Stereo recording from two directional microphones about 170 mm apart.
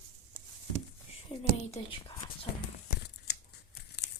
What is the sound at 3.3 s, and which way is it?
Tearing, 75° left (ahead or behind).